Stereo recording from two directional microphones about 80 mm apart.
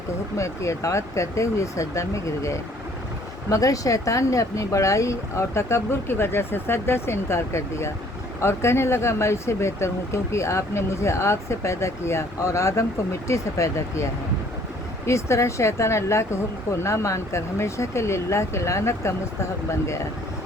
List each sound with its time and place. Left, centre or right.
0.3 s speech: left